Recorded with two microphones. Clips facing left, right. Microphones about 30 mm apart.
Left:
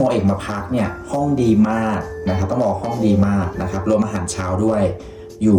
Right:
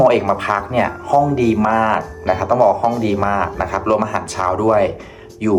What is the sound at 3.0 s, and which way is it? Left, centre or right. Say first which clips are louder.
Speech: even; right.